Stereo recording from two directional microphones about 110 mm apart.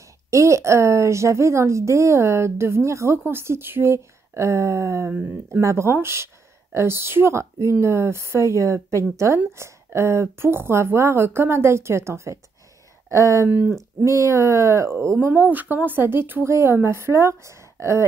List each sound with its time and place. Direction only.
0.3 s a woman's voice: 25° right (ahead or behind)